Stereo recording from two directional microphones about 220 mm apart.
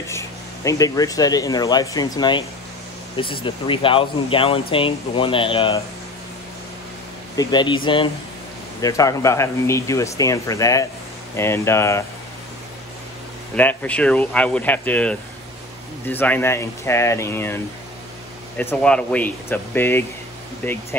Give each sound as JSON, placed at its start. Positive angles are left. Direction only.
{"t": 0.1, "sound": "speech", "side_deg": 15}
{"t": 3.4, "sound": "speech", "side_deg": 25}
{"t": 7.3, "sound": "speech", "side_deg": 20}
{"t": 13.6, "sound": "speech", "side_deg": 5}
{"t": 18.6, "sound": "speech", "side_deg": 5}